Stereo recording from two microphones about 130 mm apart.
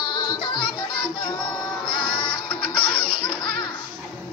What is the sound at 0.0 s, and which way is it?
Music, 35° left (ahead or behind).